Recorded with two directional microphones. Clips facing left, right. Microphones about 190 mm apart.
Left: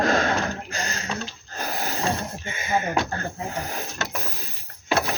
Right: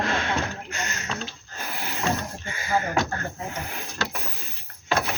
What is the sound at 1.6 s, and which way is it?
Snort, 40° left (ahead or behind).